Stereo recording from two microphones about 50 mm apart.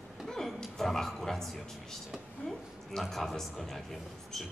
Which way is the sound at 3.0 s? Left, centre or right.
Centre.